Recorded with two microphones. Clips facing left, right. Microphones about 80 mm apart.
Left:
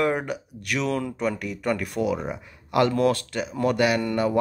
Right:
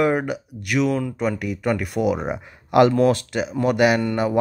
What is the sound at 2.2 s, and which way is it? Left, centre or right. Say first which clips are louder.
Speech: right 5 dB; right.